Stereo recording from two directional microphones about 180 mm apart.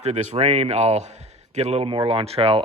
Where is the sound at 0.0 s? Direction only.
40° right (ahead or behind).